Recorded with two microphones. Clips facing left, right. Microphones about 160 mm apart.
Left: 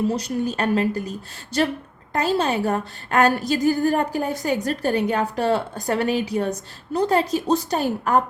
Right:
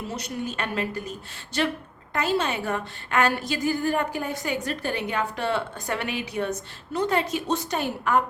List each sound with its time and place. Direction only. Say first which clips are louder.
0.1 s a woman's voice: left 7 dB; 35° left (ahead or behind)
2.1 s a woman's voice: left 4 dB; 35° left (ahead or behind)